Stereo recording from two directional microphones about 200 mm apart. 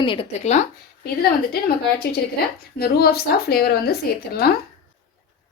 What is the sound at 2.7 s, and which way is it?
A woman's voice, 50° left (ahead or behind).